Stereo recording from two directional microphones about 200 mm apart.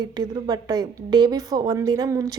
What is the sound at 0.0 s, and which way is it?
A woman's voice, 20° right (ahead or behind).